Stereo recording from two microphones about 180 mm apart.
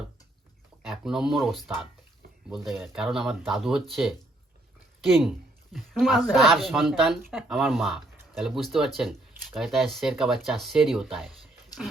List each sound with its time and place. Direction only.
0.8 s speech: centre (ahead or behind)
5.7 s speech: centre (ahead or behind)